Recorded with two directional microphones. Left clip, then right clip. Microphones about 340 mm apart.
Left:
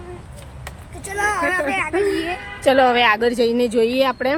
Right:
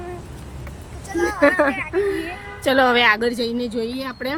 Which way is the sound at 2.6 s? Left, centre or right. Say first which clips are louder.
Left 1 dB; centre.